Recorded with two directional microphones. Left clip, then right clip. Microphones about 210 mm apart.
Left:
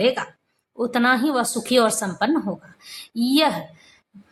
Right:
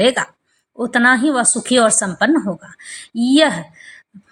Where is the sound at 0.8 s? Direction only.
10° right (ahead or behind).